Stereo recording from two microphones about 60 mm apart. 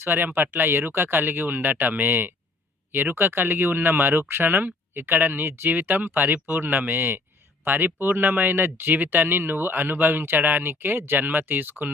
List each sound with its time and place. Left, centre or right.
0.0 s speech: right